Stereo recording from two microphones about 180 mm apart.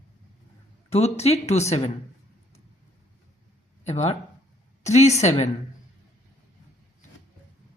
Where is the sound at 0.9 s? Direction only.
35° left (ahead or behind).